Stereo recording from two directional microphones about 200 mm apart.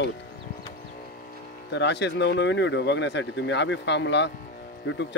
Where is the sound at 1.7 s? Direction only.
60° left (ahead or behind).